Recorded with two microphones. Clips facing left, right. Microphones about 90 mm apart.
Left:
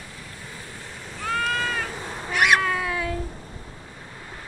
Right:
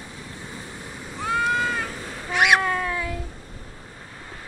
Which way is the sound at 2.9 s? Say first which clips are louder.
Left 1 dB; 20° left (ahead or behind).